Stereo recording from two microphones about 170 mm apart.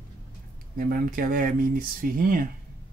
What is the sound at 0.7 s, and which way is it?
Speech, 60° right (ahead or behind).